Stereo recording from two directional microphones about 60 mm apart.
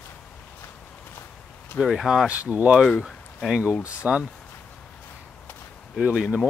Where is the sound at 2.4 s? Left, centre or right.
Right.